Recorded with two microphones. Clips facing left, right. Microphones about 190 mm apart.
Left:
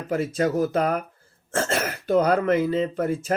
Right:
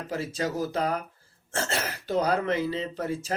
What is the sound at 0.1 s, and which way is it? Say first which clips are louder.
Speech: left 8 dB; 55° left (ahead or behind).